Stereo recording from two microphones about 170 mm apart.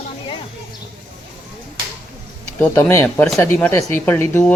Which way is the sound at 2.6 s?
15° left (ahead or behind).